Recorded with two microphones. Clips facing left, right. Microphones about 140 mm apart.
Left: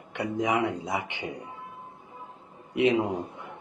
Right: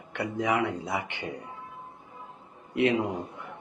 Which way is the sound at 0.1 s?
15° left (ahead or behind).